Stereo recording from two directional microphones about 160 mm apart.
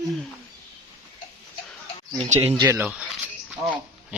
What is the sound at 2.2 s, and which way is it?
Speech, 40° right (ahead or behind).